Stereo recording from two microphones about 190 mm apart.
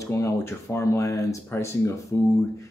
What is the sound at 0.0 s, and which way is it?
Speech, 15° left (ahead or behind).